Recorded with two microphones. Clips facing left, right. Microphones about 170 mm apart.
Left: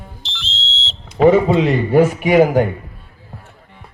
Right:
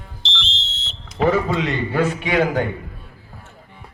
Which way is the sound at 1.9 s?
10° left (ahead or behind).